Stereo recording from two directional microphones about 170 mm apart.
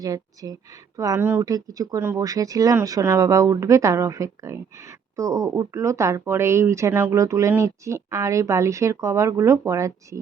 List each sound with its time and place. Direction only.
0.0 s speech: 20° right (ahead or behind)